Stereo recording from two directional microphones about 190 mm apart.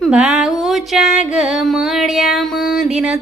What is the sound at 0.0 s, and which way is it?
Music, 5° right (ahead or behind).